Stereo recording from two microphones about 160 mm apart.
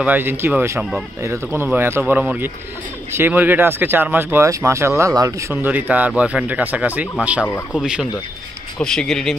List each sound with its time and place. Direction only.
0.0 s speech: 10° right (ahead or behind)
7.4 s speech: 10° left (ahead or behind)
7.8 s speech: 5° right (ahead or behind)